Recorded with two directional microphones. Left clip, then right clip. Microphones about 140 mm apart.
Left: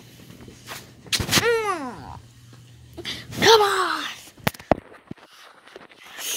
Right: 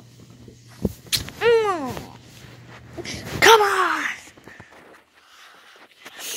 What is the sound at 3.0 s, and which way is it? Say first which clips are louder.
Dog: right 5 dB; 15° right (ahead or behind).